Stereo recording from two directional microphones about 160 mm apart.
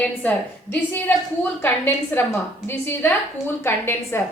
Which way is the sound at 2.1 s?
10° left (ahead or behind).